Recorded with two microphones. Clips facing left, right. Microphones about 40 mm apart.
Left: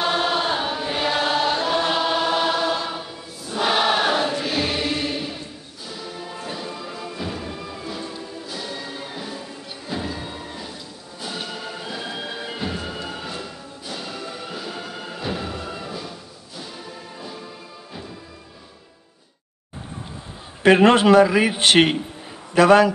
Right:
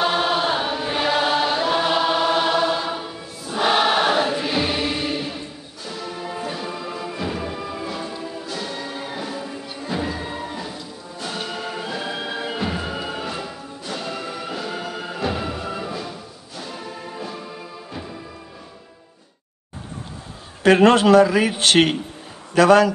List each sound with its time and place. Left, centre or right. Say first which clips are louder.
0.0 s chant: right 1 dB; centre
5.9 s music: right 4 dB; centre
20.6 s a man's voice: even; left